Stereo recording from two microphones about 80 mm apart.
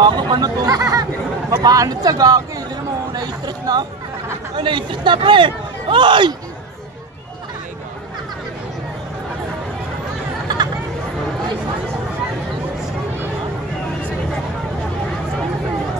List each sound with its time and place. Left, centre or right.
0.0 s speech: right
4.6 s a man's voice: right
10.5 s chatter: right